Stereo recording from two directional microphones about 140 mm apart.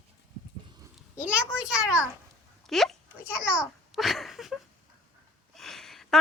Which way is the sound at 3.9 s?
Centre (ahead or behind).